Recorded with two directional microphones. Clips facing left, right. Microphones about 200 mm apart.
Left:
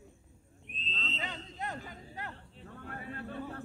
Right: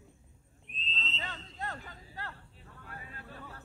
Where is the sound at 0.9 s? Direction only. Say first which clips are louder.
Left 3 dB; 55° left (ahead or behind).